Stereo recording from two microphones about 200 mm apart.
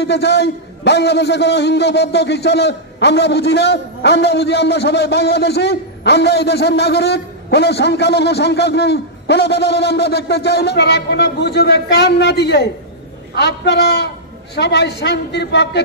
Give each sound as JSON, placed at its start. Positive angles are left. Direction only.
{"t": 0.0, "sound": "a man's voice", "side_deg": 60}